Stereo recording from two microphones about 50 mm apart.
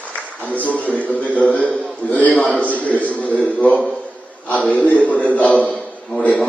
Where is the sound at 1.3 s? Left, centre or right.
Left.